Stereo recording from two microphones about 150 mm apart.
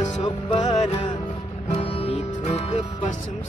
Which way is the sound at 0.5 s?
30° left (ahead or behind).